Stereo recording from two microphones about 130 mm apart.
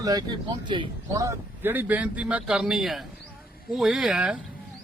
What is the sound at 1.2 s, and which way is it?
Speech, 15° right (ahead or behind).